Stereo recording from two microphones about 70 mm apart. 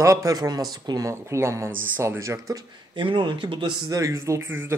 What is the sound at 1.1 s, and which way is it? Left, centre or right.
Speech, right.